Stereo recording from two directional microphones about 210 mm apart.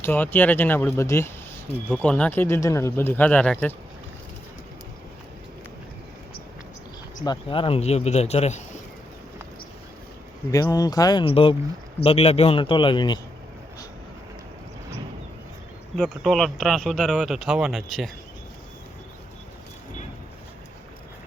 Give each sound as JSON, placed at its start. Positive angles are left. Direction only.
{"t": 0.0, "sound": "speech", "side_deg": 10}
{"t": 7.3, "sound": "speech", "side_deg": 25}
{"t": 10.5, "sound": "a man's voice", "side_deg": 15}
{"t": 16.0, "sound": "speech", "side_deg": 0}